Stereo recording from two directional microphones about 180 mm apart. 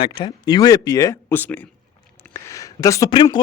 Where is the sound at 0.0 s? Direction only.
30° left (ahead or behind).